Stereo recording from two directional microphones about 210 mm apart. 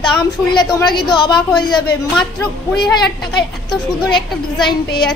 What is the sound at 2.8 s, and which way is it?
A woman's voice, centre (ahead or behind).